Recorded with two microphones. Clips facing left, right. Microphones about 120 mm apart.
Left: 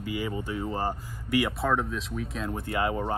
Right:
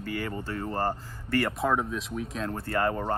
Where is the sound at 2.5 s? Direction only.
15° left (ahead or behind).